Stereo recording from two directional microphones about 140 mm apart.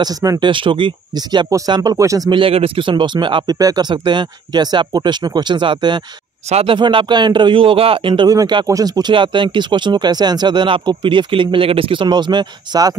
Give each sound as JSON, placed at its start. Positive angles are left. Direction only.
{"t": 0.0, "sound": "speech", "side_deg": -25}
{"t": 0.5, "sound": "a man's voice", "side_deg": -35}
{"t": 2.4, "sound": "a man's voice", "side_deg": -40}